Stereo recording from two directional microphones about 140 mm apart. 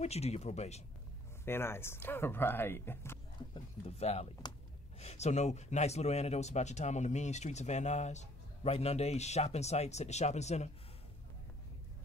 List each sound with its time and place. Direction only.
0.0 s speech: 50° left (ahead or behind)
1.4 s speech: 15° left (ahead or behind)
3.8 s speech: 50° left (ahead or behind)